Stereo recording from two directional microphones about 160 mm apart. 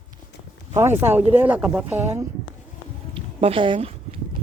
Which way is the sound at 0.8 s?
15° right (ahead or behind).